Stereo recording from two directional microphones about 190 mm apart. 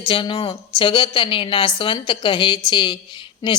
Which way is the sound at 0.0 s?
25° left (ahead or behind).